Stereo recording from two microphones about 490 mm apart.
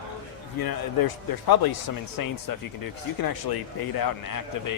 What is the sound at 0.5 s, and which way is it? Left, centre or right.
A man's voice, left.